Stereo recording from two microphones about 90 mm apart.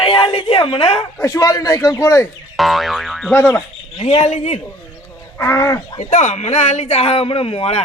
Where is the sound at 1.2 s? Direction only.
40° left (ahead or behind).